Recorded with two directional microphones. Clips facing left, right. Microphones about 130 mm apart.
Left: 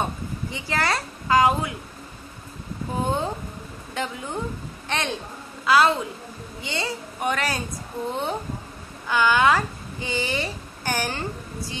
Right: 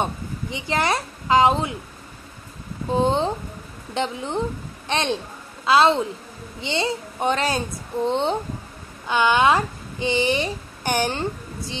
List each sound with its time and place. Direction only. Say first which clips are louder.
0.0 s speech: right 2 dB; 20° right (ahead or behind)
2.9 s a child's voice: right 5 dB; 25° right (ahead or behind)